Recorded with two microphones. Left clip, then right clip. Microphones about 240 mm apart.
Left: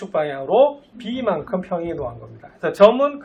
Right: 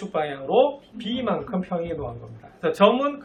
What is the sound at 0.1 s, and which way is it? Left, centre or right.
Speech, centre.